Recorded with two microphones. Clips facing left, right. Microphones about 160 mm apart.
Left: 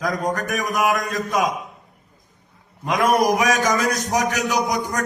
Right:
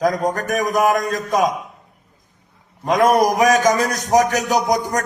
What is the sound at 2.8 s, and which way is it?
A man's voice, 40° right (ahead or behind).